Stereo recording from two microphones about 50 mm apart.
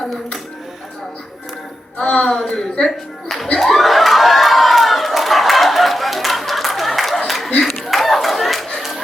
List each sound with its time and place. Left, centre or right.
2.0 s a woman's voice: centre
3.6 s crowd: centre
7.3 s a sound: centre